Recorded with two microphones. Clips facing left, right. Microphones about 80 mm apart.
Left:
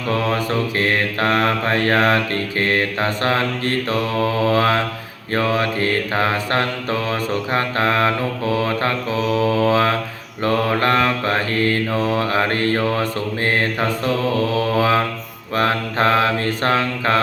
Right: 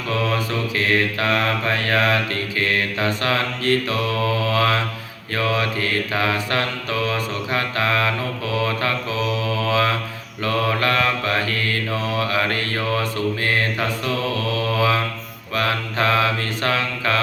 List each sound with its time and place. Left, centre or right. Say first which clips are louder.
0.1 s mantra: left 3 dB; left